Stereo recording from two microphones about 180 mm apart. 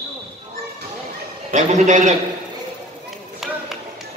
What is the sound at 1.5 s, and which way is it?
Speech, 40° right (ahead or behind).